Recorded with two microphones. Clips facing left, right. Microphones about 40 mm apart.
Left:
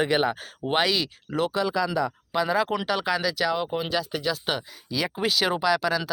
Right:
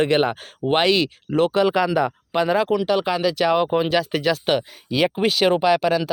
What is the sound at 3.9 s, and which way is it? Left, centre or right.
Speech, right.